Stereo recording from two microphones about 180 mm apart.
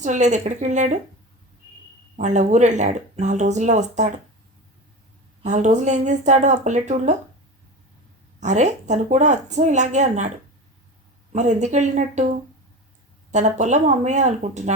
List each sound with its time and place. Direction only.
0.0 s speech: 40° right (ahead or behind)
2.1 s speech: 40° right (ahead or behind)
5.4 s speech: 40° right (ahead or behind)
8.4 s speech: 40° right (ahead or behind)
13.3 s speech: 40° right (ahead or behind)